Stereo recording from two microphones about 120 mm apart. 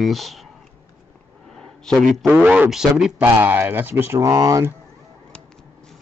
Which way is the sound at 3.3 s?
20° right (ahead or behind).